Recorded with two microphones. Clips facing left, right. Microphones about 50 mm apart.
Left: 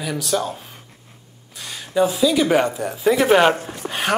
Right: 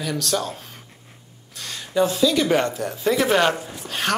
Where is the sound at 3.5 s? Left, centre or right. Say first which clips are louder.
Left 4 dB; left.